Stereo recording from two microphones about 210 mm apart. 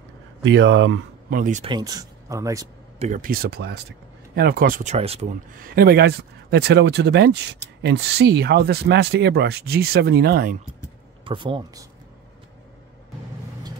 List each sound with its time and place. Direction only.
0.4 s speech: 60° right (ahead or behind)
1.3 s speech: 40° right (ahead or behind)
1.6 s speech: 20° right (ahead or behind)
3.0 s speech: 40° right (ahead or behind)
11.2 s speech: 25° right (ahead or behind)